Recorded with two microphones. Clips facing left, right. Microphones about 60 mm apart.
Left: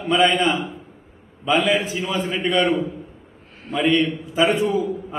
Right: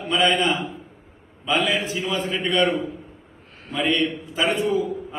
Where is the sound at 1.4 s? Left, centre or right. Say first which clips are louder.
Left 3 dB; centre.